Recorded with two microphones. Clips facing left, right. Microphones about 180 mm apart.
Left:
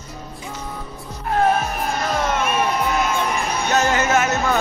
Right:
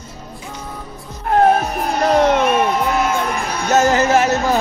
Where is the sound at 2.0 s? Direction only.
65° right (ahead or behind).